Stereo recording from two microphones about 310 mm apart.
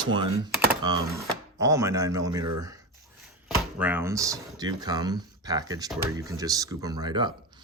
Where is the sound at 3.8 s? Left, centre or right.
Centre.